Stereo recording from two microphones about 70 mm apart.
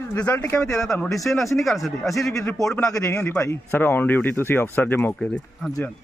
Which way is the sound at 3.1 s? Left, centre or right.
Left.